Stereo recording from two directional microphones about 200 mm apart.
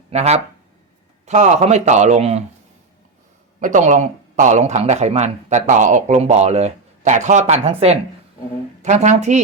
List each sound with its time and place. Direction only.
0.1 s speech: 35° right (ahead or behind)
3.6 s speech: 40° right (ahead or behind)